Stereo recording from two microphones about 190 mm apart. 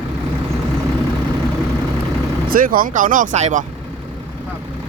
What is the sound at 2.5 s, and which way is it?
Speech, 45° right (ahead or behind).